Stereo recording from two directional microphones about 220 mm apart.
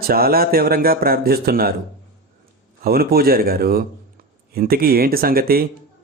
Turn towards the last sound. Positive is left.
turn(degrees=-45)  # may be behind; listen again after turning